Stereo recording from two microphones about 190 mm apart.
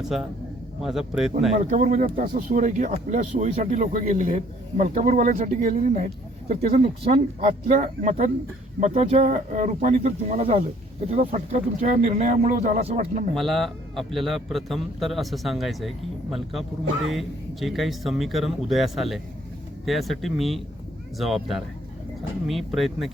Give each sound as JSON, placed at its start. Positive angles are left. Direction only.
{"t": 0.8, "sound": "a man's voice", "side_deg": 0}
{"t": 1.5, "sound": "speech", "side_deg": -40}
{"t": 13.3, "sound": "a man's voice", "side_deg": 0}